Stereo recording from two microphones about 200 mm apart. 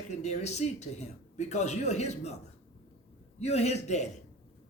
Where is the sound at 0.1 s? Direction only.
35° left (ahead or behind).